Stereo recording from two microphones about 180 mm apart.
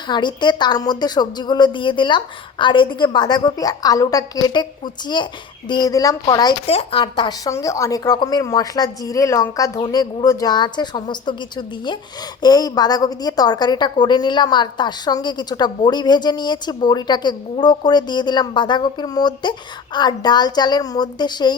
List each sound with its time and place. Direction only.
0.1 s a woman's voice: 25° left (ahead or behind)